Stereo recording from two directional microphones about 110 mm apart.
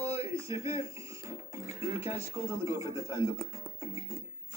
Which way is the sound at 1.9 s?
25° right (ahead or behind).